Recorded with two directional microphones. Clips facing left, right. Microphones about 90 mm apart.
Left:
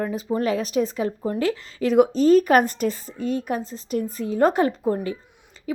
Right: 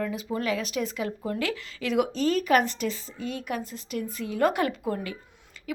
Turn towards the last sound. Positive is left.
turn(degrees=30)  # may be behind; listen again after turning